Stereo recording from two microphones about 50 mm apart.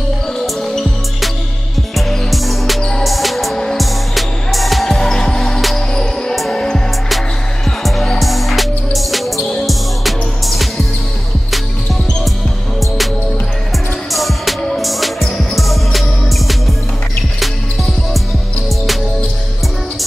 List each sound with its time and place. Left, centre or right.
0.6 s music: centre
7.6 s music: centre
14.1 s music: centre